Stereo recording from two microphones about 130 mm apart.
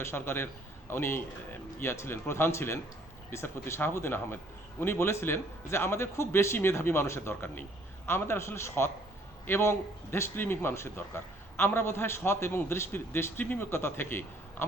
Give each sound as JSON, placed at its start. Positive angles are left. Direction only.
{"t": 0.0, "sound": "a man's voice", "side_deg": 20}